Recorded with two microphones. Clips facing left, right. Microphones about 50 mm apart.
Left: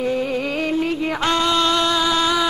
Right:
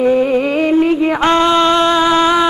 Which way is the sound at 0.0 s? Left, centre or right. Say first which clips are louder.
Right 9 dB; right.